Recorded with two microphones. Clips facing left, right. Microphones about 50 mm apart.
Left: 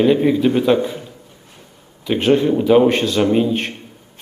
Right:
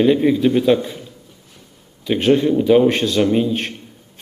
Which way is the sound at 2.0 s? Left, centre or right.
Centre.